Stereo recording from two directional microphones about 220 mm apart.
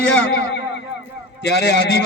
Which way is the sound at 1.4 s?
50° left (ahead or behind).